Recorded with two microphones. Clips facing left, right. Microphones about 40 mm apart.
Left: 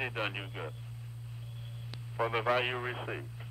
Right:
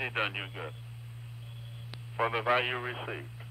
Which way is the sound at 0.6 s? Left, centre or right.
Centre.